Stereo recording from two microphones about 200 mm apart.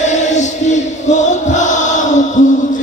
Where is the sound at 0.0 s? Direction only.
35° left (ahead or behind).